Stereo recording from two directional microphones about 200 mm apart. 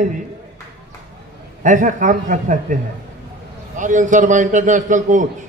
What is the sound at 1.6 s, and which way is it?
A man's voice, 40° right (ahead or behind).